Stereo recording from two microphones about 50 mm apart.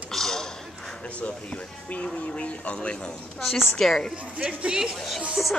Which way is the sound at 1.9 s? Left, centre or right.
Left.